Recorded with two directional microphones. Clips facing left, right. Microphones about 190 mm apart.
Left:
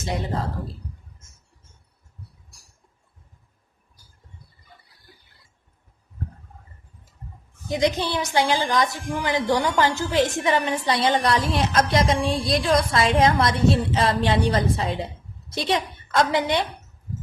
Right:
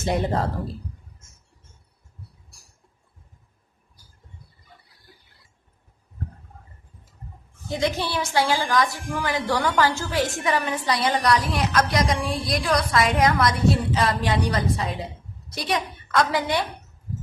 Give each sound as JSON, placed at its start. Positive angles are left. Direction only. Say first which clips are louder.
{"t": 7.7, "sound": "a woman's voice", "louder": "left 3 dB", "side_deg": 20}